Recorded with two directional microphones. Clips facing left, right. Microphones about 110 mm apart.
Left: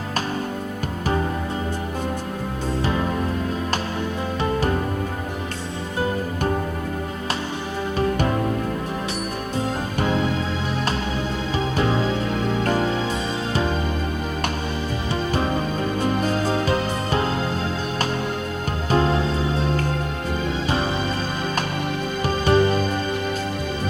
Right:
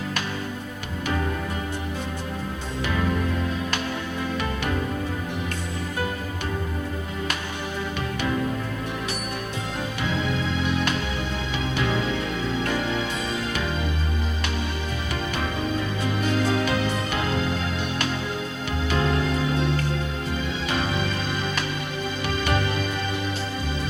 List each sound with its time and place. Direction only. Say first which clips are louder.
7.9 s music: left 8 dB; 45° left (ahead or behind)
15.1 s music: left 6 dB; 35° left (ahead or behind)
18.9 s music: left 5 dB; 35° left (ahead or behind)
22.2 s music: left 8 dB; 35° left (ahead or behind)